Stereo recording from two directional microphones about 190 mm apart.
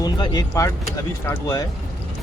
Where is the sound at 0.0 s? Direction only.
20° left (ahead or behind).